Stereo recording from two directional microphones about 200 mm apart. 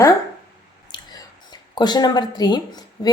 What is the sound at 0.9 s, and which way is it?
Speech, 20° left (ahead or behind).